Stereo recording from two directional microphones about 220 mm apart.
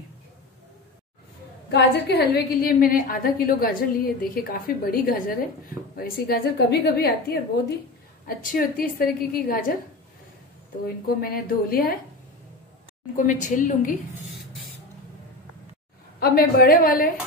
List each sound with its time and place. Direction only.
1.7 s a woman's voice: 50° left (ahead or behind)
11.1 s a woman's voice: 40° left (ahead or behind)
13.1 s a woman's voice: 35° left (ahead or behind)
16.2 s a woman's voice: 45° left (ahead or behind)